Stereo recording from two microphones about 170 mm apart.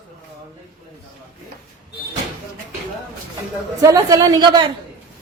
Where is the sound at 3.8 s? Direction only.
20° right (ahead or behind).